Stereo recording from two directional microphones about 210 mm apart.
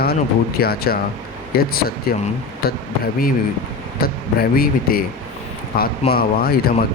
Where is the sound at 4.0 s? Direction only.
45° left (ahead or behind).